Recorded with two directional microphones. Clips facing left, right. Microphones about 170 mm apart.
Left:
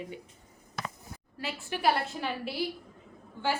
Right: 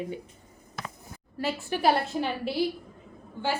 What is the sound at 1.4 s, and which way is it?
A woman's voice, 35° right (ahead or behind).